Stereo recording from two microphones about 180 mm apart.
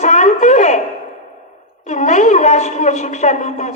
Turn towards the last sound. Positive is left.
turn(degrees=40)  # may be behind; listen again after turning